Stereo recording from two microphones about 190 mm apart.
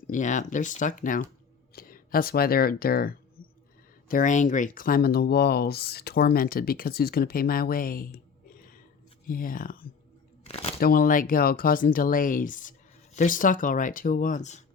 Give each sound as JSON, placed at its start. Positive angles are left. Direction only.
{"t": 0.1, "sound": "speech", "side_deg": 40}
{"t": 10.4, "sound": "a sound", "side_deg": 30}
{"t": 10.8, "sound": "speech", "side_deg": 50}